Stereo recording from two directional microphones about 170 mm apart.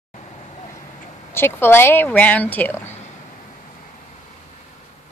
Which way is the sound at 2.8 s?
40° left (ahead or behind).